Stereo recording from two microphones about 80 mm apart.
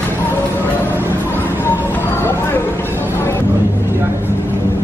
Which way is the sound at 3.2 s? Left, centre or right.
Left.